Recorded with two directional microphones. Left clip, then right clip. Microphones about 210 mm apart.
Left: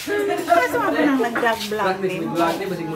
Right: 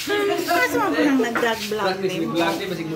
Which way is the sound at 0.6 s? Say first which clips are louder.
Left 1 dB; 30° right (ahead or behind).